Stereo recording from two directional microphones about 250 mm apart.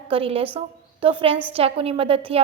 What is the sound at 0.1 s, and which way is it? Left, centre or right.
A woman's voice, right.